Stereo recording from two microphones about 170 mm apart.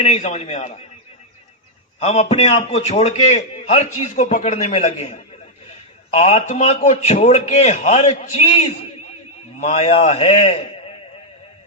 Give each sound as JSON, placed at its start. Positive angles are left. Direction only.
{"t": 0.0, "sound": "a man's voice", "side_deg": 40}
{"t": 2.0, "sound": "a man's voice", "side_deg": 35}